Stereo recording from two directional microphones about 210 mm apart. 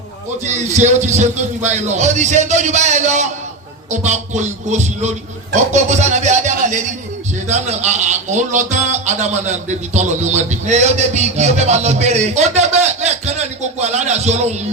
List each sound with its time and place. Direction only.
0.4 s a man's voice: 35° right (ahead or behind)